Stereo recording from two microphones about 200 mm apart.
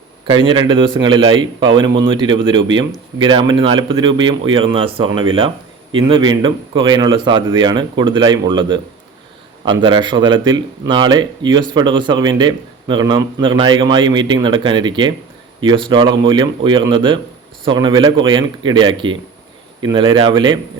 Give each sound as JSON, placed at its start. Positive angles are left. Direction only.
{"t": 0.3, "sound": "speech", "side_deg": -25}
{"t": 9.8, "sound": "speech", "side_deg": -25}